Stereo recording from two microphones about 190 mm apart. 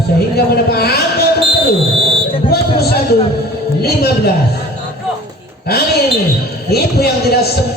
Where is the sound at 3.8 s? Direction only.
55° left (ahead or behind).